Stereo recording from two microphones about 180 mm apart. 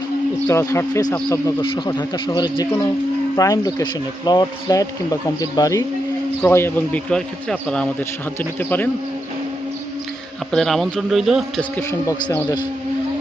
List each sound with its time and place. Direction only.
0.4 s a man's voice: 15° left (ahead or behind)
10.5 s a man's voice: centre (ahead or behind)
11.8 s a man's voice: 15° left (ahead or behind)